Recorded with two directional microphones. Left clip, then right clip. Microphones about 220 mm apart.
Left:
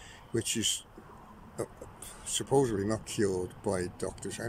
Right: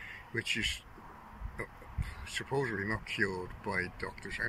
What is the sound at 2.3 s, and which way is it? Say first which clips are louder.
Speech: left 6 dB; 20° left (ahead or behind).